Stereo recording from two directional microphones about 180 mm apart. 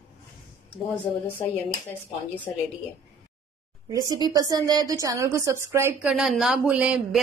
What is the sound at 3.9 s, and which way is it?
A woman's voice, 20° right (ahead or behind).